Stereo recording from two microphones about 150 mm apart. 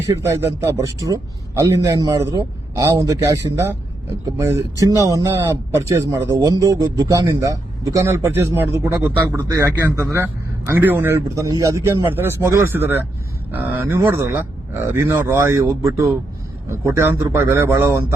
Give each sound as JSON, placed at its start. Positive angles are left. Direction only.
{"t": 0.1, "sound": "a man's voice", "side_deg": -20}